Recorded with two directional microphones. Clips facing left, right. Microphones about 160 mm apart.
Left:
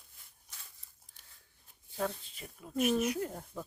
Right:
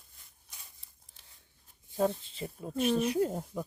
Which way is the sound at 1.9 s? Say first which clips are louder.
Right 7 dB; 20° right (ahead or behind).